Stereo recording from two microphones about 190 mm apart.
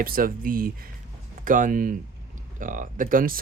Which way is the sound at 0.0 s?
50° right (ahead or behind).